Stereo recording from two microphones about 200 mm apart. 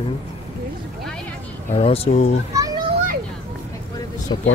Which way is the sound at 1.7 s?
30° left (ahead or behind).